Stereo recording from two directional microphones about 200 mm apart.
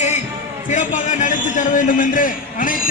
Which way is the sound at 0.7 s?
40° left (ahead or behind).